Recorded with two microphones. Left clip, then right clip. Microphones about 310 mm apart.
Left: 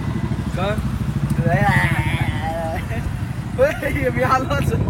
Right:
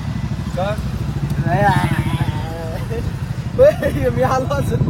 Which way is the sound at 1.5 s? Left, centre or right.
Centre.